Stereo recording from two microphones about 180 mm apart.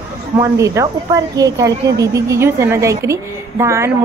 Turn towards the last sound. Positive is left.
turn(degrees=-15)  # may be behind; listen again after turning